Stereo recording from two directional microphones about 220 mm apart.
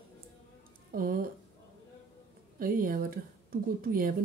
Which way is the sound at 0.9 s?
40° right (ahead or behind).